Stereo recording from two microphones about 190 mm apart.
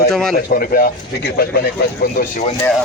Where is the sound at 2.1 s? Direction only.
35° left (ahead or behind).